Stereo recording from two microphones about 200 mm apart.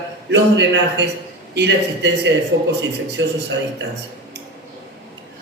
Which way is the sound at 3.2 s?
65° right (ahead or behind).